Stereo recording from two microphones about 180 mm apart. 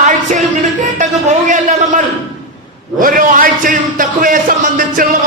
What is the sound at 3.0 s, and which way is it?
A man's voice, 50° right (ahead or behind).